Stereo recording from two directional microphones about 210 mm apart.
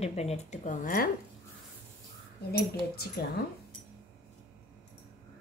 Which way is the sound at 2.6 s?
50° left (ahead or behind).